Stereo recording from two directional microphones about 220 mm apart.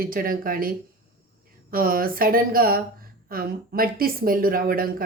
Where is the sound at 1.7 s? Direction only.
40° right (ahead or behind).